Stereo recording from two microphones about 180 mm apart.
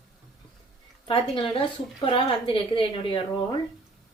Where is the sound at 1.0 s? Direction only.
30° left (ahead or behind).